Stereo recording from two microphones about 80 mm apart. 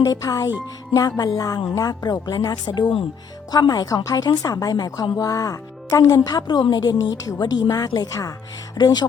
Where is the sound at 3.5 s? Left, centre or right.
Left.